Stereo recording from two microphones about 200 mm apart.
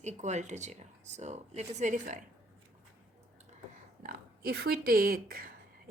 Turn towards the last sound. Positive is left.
turn(degrees=-45)  # may be behind; listen again after turning